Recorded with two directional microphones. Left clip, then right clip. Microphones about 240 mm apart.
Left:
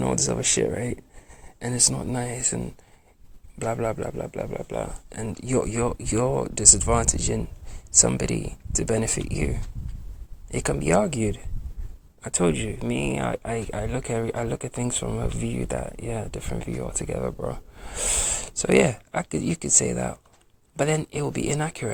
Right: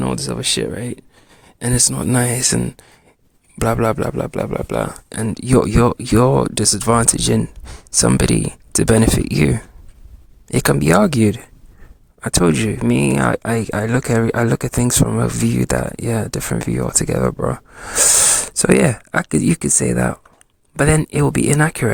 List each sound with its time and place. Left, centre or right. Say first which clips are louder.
0.0 s speech: right 3 dB; right
1.6 s speech: right 6 dB; right